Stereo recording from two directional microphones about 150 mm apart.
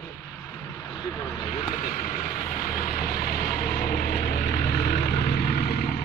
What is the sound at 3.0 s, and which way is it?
Vehicle, 80° left.